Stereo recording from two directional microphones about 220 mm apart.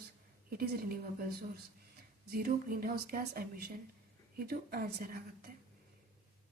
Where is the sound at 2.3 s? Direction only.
40° right (ahead or behind).